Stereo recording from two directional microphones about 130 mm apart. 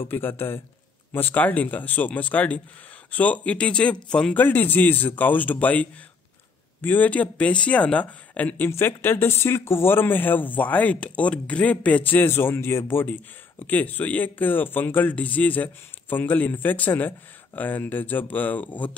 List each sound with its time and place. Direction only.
0.1 s speech: 15° left (ahead or behind)